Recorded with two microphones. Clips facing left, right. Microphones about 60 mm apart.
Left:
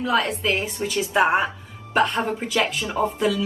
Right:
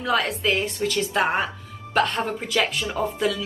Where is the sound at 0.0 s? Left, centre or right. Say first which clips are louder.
Left 1 dB; centre.